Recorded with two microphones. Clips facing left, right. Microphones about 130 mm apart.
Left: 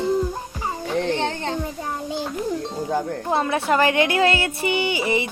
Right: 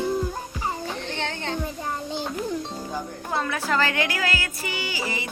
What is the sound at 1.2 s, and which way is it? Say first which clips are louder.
Speech: left 5 dB; 35° left (ahead or behind).